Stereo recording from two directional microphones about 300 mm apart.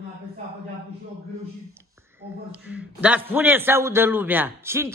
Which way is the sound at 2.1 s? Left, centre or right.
Centre.